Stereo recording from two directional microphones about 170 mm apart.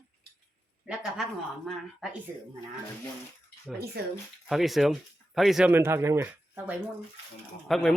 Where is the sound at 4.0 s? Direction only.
70° right (ahead or behind).